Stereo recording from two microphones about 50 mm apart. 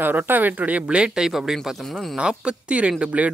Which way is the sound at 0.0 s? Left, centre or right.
Right.